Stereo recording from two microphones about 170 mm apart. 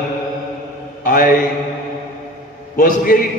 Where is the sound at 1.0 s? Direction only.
55° left (ahead or behind).